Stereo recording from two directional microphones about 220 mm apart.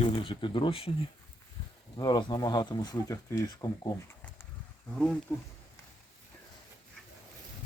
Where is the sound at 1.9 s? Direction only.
20° left (ahead or behind).